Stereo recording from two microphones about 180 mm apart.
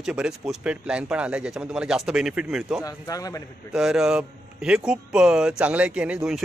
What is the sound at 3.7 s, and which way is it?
A man's voice, 5° right (ahead or behind).